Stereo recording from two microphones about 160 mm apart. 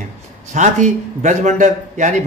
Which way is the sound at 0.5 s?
50° right (ahead or behind).